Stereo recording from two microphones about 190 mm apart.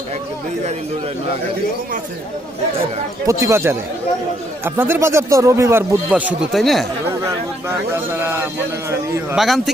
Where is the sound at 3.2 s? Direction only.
15° right (ahead or behind); by 6.9 s centre (ahead or behind).